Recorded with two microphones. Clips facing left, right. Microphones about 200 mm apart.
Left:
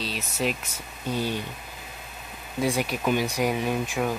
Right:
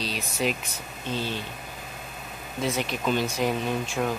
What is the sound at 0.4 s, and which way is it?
Speech, 5° left (ahead or behind).